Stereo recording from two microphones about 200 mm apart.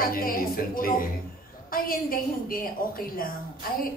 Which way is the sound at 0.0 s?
45° left (ahead or behind).